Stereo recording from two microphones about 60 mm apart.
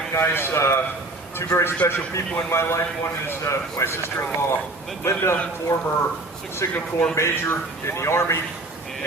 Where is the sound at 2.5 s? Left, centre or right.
Left.